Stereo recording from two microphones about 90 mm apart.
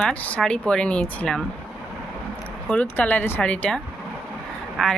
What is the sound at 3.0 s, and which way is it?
Speech, 25° left (ahead or behind).